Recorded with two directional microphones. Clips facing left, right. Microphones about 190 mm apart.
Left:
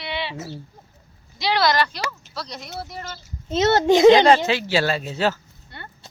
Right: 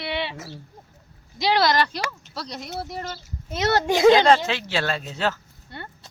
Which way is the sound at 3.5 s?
25° left (ahead or behind).